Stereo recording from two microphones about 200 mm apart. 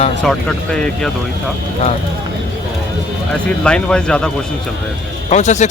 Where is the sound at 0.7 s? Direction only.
5° left (ahead or behind).